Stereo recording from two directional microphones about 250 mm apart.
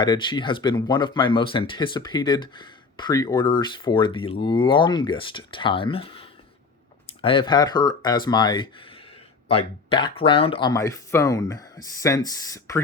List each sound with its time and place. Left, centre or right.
0.0 s speech: centre